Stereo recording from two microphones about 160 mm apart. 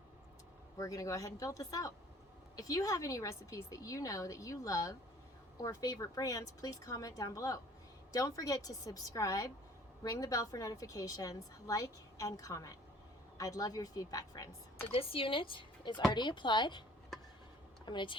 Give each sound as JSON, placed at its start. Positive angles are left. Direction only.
{"t": 0.8, "sound": "a woman's voice", "side_deg": 20}
{"t": 14.9, "sound": "a woman's voice", "side_deg": 35}
{"t": 17.8, "sound": "a woman's voice", "side_deg": 30}